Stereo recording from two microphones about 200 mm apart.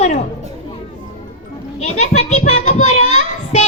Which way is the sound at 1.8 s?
35° left (ahead or behind).